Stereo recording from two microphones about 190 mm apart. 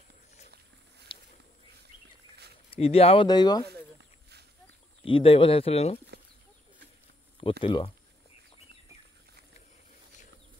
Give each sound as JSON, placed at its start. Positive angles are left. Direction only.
{"t": 1.1, "sound": "walk", "side_deg": 25}
{"t": 2.7, "sound": "speech", "side_deg": 30}
{"t": 3.6, "sound": "a sound", "side_deg": -60}
{"t": 5.0, "sound": "speech", "side_deg": 30}
{"t": 7.6, "sound": "speech", "side_deg": 25}